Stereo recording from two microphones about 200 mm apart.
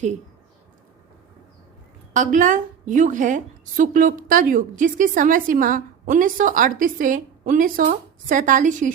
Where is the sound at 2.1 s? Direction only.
40° right (ahead or behind).